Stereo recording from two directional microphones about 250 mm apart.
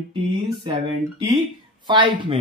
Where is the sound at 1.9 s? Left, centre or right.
Centre.